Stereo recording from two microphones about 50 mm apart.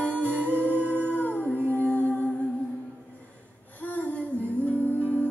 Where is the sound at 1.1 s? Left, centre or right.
Left.